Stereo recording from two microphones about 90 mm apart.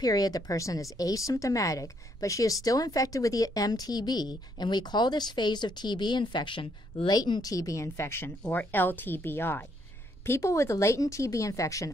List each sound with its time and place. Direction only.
0.0 s speech: 45° left (ahead or behind); by 7.1 s 70° left (ahead or behind)
7.1 s speech: 50° left (ahead or behind)
7.5 s a woman's voice: 35° left (ahead or behind)